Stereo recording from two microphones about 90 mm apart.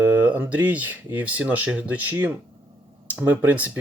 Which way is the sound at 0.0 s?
20° right (ahead or behind).